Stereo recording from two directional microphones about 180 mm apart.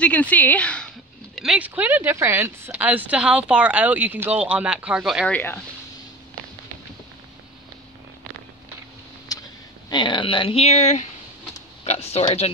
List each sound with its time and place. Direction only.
0.0 s speech: 10° left (ahead or behind)
9.3 s a sound: 20° left (ahead or behind)
9.8 s speech: 25° left (ahead or behind)